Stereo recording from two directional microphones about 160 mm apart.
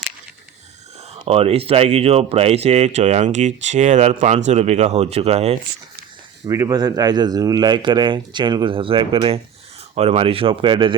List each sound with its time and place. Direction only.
1.3 s speech: 40° right (ahead or behind)
6.4 s speech: 20° right (ahead or behind)